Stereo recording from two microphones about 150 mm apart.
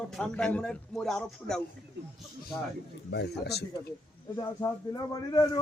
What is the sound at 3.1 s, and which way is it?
Speech, 90° left.